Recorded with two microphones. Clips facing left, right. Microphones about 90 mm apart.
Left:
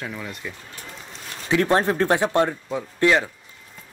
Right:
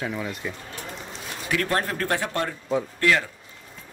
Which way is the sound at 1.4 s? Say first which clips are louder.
Left 6 dB; 25° left (ahead or behind).